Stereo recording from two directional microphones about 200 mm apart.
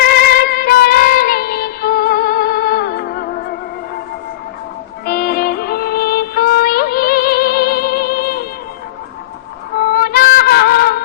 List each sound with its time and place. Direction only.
0.0 s music: 50° left (ahead or behind)
5.0 s music: 50° left (ahead or behind)
9.7 s music: 50° left (ahead or behind)